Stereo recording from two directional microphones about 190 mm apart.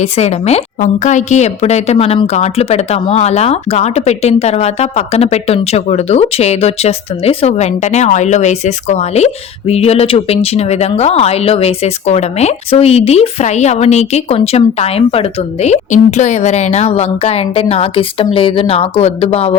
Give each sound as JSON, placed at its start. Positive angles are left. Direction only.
{"t": 0.0, "sound": "a woman's voice", "side_deg": 35}